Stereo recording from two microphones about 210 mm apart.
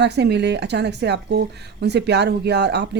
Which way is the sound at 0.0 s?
55° right (ahead or behind).